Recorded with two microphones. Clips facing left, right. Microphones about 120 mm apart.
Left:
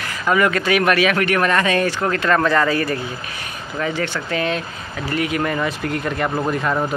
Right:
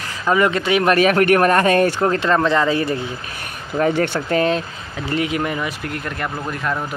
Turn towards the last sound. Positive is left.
turn(degrees=5)  # may be behind; listen again after turning